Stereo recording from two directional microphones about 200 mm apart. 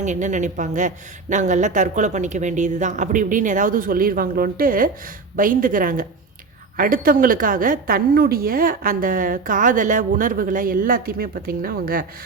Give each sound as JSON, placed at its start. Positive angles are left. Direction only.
{"t": 0.0, "sound": "a woman's voice", "side_deg": -35}